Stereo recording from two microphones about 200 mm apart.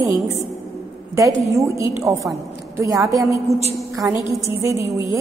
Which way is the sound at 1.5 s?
15° right (ahead or behind).